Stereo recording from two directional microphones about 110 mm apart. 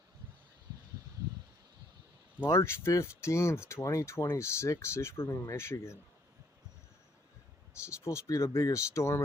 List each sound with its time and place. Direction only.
2.5 s speech: 25° left (ahead or behind)
7.7 s speech: 25° left (ahead or behind)